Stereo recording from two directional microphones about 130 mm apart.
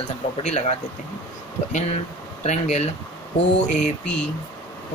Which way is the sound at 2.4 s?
60° left (ahead or behind).